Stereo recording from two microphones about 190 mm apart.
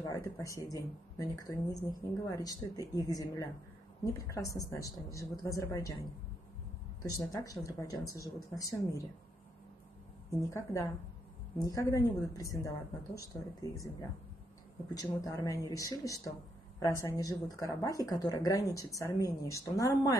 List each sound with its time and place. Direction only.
0.0 s speech: 20° left (ahead or behind)
7.0 s speech: 15° left (ahead or behind)
10.5 s a woman's voice: 15° left (ahead or behind)
15.0 s speech: 15° left (ahead or behind)